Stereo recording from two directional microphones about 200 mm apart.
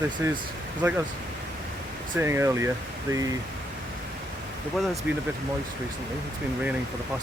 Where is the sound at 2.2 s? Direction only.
15° right (ahead or behind).